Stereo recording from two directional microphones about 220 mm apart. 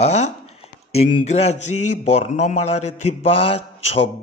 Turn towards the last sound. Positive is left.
turn(degrees=25)  # may be behind; listen again after turning